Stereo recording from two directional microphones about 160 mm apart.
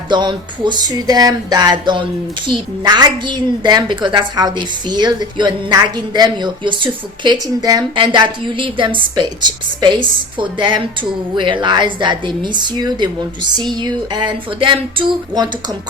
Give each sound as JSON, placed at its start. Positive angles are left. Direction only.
{"t": 0.1, "sound": "a woman's voice", "side_deg": -30}